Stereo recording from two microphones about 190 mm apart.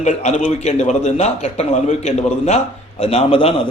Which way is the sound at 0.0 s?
35° left (ahead or behind).